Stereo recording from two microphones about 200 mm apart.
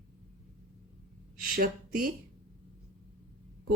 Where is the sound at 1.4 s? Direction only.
45° right (ahead or behind).